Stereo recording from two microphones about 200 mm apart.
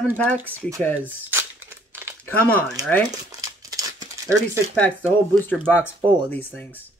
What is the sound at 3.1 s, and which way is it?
Crumpling, 20° right (ahead or behind).